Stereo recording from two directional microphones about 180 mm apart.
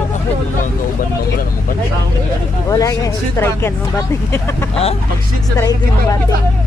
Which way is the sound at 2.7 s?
20° left (ahead or behind).